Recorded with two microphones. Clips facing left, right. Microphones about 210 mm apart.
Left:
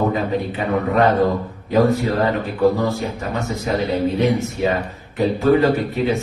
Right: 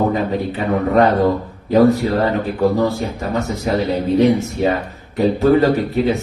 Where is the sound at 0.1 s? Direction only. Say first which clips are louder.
Right 2 dB; 35° right (ahead or behind).